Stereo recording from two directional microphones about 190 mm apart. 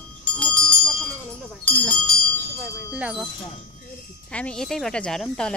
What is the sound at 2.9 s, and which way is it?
Speech, 5° right (ahead or behind).